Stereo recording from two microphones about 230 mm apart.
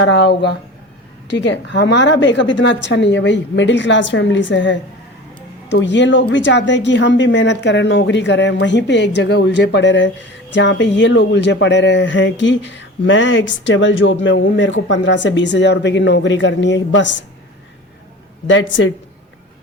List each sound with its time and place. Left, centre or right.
0.0 s speech: left
18.4 s speech: left